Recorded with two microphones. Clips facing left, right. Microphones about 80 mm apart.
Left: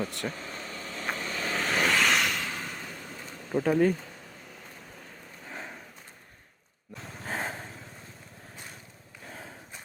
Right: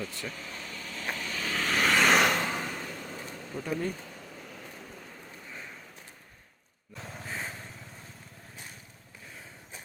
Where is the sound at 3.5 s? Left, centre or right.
Left.